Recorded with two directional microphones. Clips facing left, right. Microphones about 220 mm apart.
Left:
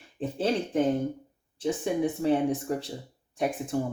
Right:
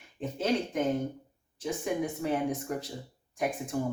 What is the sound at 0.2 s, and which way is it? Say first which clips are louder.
Speech: left 2 dB; 30° left (ahead or behind).